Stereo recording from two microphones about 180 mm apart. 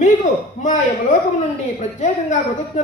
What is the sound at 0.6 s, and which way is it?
A woman's voice, 45° left (ahead or behind).